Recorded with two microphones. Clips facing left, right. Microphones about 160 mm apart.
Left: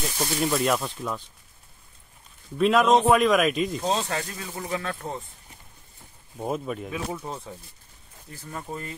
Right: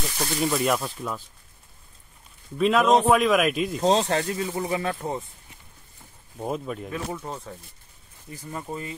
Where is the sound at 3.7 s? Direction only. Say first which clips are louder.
Right 5 dB; 35° right (ahead or behind).